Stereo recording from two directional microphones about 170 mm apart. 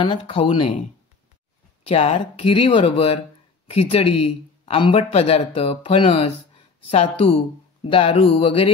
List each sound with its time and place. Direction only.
0.0 s speech: 30° left (ahead or behind)
1.9 s speech: 35° left (ahead or behind)